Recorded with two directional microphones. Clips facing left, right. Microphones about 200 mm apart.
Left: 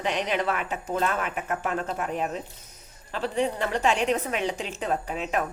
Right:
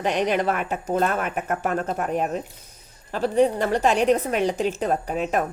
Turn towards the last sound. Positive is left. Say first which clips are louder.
# right 4 dB
turn(degrees=-45)  # may be behind; listen again after turning